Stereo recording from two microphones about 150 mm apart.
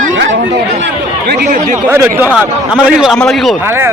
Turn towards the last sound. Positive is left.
turn(degrees=0)  # may be behind; listen again after turning